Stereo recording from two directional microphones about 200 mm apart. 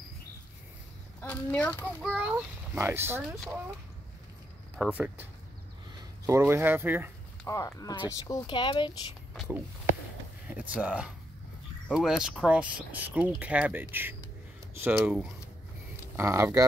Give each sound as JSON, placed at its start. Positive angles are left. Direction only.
{"t": 1.2, "sound": "speech", "side_deg": 5}
{"t": 2.0, "sound": "a child's voice", "side_deg": -5}
{"t": 4.7, "sound": "a child's voice", "side_deg": -5}
{"t": 7.4, "sound": "speech", "side_deg": 15}
{"t": 10.5, "sound": "a child's voice", "side_deg": -5}